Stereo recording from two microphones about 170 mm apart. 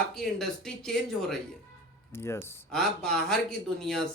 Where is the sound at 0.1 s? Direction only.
Centre (ahead or behind).